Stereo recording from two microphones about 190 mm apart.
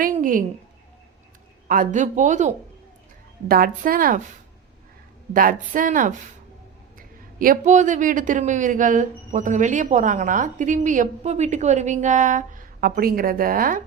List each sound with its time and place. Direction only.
0.0 s a sound: 45° right (ahead or behind)
1.6 s a man's voice: 45° right (ahead or behind)
3.5 s a woman's voice: 50° right (ahead or behind)
5.3 s a woman's voice: 45° right (ahead or behind)
7.3 s a man's voice: 45° right (ahead or behind)